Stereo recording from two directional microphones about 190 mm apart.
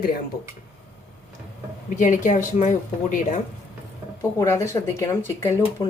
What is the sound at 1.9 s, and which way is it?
Speech, 40° left (ahead or behind).